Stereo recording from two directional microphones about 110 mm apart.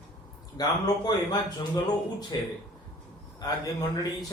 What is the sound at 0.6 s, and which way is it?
A man's voice, 35° left (ahead or behind).